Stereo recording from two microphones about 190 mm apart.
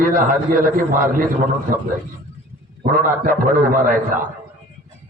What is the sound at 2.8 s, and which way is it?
A man's voice, 45° right (ahead or behind).